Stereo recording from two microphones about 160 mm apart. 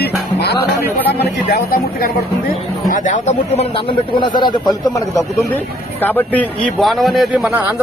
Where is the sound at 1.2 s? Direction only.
80° left.